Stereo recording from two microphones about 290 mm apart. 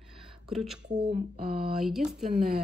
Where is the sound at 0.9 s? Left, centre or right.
Right.